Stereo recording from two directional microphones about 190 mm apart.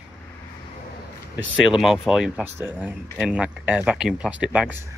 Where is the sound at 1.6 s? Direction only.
Centre (ahead or behind).